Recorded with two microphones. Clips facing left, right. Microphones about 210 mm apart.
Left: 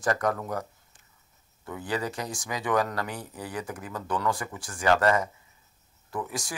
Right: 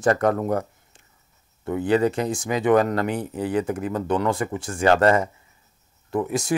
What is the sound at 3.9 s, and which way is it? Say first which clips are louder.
Speech: right 6 dB; 25° right (ahead or behind).